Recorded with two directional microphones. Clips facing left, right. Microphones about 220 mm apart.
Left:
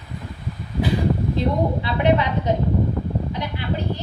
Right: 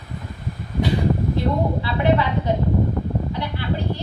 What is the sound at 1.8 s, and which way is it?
Speech, 20° left (ahead or behind).